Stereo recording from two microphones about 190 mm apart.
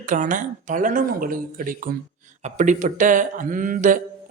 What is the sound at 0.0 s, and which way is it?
Speech, 45° right (ahead or behind).